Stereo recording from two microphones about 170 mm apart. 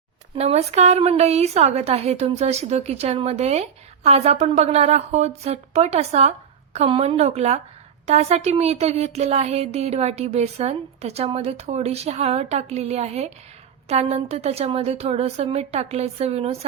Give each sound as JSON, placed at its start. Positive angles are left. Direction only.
{"t": 0.3, "sound": "a woman's voice", "side_deg": -40}